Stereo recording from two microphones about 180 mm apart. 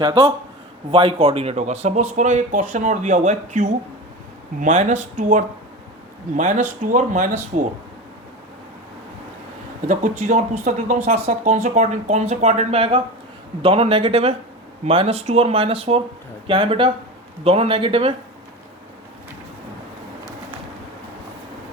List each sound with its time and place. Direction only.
0.0 s speech: 30° right (ahead or behind); by 7.7 s 45° right (ahead or behind)
9.8 s speech: 40° right (ahead or behind)